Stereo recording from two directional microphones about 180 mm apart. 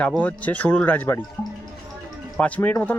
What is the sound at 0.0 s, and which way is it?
Speech, 5° left (ahead or behind).